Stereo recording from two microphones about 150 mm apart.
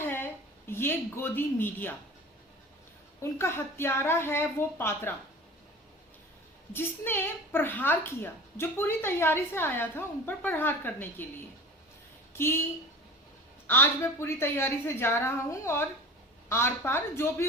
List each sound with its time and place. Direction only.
0.0 s a sound: 15° left (ahead or behind)
0.7 s a woman's voice: 15° left (ahead or behind)
3.2 s a woman's voice: 15° left (ahead or behind)
6.7 s a woman's voice: 15° left (ahead or behind)
13.7 s a woman's voice: 15° left (ahead or behind)